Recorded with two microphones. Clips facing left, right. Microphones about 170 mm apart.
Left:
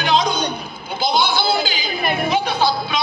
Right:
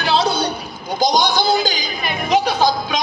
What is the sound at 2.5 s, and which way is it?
Music, 45° right (ahead or behind).